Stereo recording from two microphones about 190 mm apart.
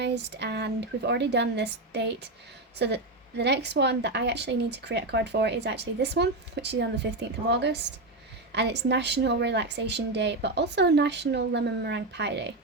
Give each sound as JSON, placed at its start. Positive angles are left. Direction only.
{"t": 0.0, "sound": "a woman's voice", "side_deg": -65}